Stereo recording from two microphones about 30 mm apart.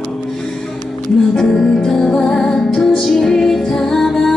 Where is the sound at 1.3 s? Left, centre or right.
Centre.